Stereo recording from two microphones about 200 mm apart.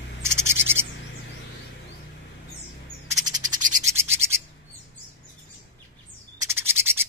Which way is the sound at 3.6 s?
40° right (ahead or behind).